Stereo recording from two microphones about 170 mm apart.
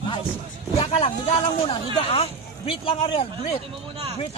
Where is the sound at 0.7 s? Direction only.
35° left (ahead or behind).